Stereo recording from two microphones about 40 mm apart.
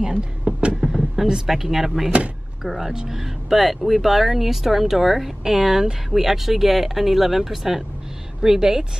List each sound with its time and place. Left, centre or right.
0.5 s a sound: right
0.9 s speech: centre
2.0 s speech: right
2.6 s speech: centre
3.2 s speech: centre